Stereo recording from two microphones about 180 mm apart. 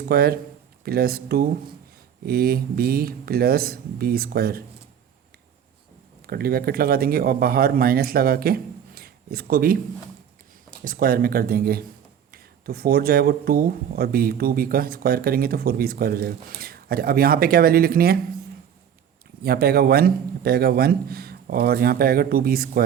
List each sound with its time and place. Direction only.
0.0 s speech: 60° right (ahead or behind)
6.2 s speech: 55° right (ahead or behind)
10.8 s speech: 55° right (ahead or behind)
19.4 s speech: 60° right (ahead or behind)